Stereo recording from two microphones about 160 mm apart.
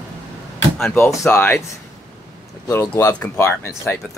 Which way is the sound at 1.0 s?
15° left (ahead or behind).